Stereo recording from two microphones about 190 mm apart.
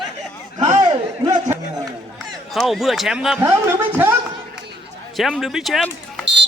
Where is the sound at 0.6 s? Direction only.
35° right (ahead or behind).